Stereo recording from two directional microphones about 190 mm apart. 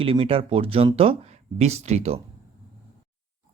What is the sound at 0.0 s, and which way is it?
A man's voice, 30° right (ahead or behind).